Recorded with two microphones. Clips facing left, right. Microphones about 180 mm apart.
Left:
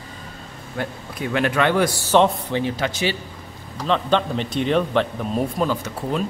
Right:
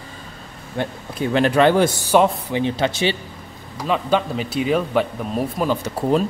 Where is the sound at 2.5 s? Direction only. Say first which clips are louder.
Right 3 dB; 25° right (ahead or behind).